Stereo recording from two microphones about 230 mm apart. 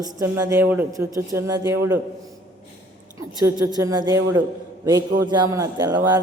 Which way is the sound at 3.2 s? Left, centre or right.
Centre.